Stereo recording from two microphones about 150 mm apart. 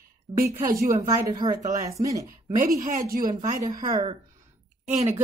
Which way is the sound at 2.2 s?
70° right (ahead or behind).